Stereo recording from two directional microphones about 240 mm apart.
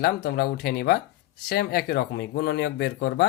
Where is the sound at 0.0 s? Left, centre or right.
Left.